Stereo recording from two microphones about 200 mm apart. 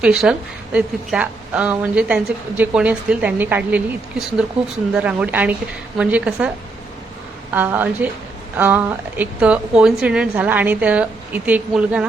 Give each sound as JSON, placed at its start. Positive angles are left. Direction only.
{"t": 0.0, "sound": "a woman's voice", "side_deg": -5}
{"t": 7.5, "sound": "a woman's voice", "side_deg": -10}